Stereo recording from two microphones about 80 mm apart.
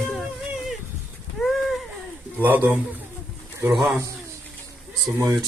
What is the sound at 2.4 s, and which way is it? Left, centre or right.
Speech, right.